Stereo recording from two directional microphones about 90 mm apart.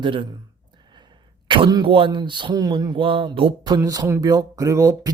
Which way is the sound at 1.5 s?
65° right (ahead or behind).